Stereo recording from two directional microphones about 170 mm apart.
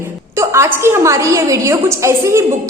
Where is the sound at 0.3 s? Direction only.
15° right (ahead or behind).